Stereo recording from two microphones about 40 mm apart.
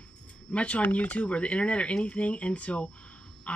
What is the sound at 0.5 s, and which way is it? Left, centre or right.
Speech, left.